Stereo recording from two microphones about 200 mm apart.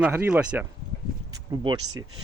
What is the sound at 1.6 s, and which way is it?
Speech, 20° right (ahead or behind).